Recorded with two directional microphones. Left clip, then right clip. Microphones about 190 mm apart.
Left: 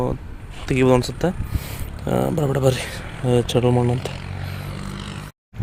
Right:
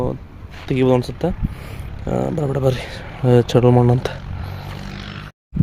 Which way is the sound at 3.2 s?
30° right (ahead or behind).